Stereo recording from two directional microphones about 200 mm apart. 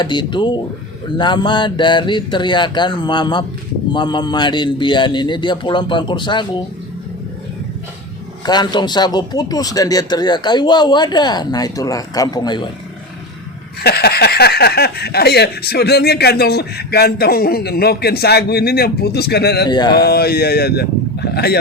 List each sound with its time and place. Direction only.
0.0 s a man's voice: 25° left (ahead or behind)
8.4 s a man's voice: 20° left (ahead or behind)
13.8 s speech: 50° left (ahead or behind)
19.6 s a man's voice: 20° left (ahead or behind)
20.0 s speech: 50° left (ahead or behind)